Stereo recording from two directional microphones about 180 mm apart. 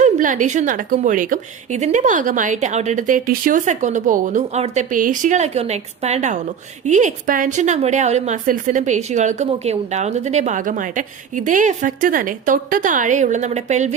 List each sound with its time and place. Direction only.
0.0 s a woman's voice: 45° right (ahead or behind)